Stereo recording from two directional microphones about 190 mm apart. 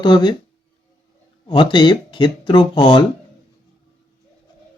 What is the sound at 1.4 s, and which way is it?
Speech, 25° left (ahead or behind).